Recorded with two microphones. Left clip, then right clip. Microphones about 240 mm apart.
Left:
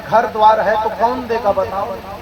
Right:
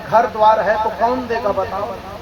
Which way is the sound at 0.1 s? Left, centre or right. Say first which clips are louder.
Left 1 dB; left.